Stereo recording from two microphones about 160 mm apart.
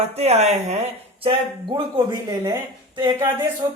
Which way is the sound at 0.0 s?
40° right (ahead or behind).